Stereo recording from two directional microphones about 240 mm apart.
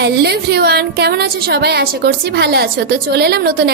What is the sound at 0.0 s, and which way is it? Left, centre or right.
A woman's voice, right.